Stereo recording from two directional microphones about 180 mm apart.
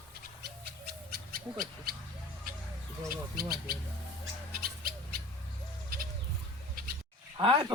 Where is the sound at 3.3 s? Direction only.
55° right (ahead or behind).